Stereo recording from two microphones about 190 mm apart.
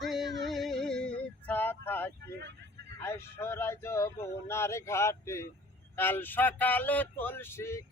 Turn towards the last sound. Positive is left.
turn(degrees=15)  # may be behind; listen again after turning